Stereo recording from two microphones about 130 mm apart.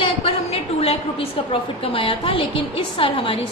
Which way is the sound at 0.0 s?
50° left (ahead or behind).